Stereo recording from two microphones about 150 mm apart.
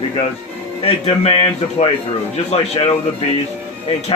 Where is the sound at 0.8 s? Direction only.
40° left (ahead or behind).